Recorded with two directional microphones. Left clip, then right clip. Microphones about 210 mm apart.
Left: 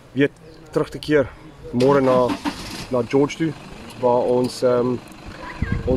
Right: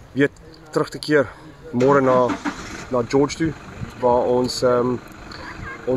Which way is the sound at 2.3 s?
50° left (ahead or behind).